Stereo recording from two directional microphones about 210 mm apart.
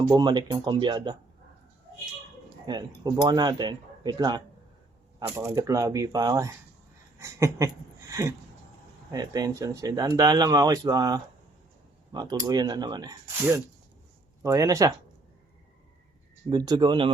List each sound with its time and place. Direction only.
0.2 s speech: 20° right (ahead or behind)
2.7 s speech: 20° right (ahead or behind)
9.1 s speech: 15° right (ahead or behind)
16.5 s speech: 20° right (ahead or behind)